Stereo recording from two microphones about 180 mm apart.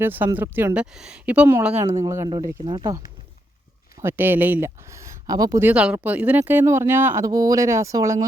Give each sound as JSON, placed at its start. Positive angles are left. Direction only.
{"t": 0.0, "sound": "speech", "side_deg": -10}
{"t": 4.0, "sound": "speech", "side_deg": -10}
{"t": 5.6, "sound": "speech", "side_deg": -5}